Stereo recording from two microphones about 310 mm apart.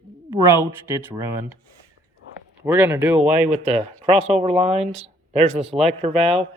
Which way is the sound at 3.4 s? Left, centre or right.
Right.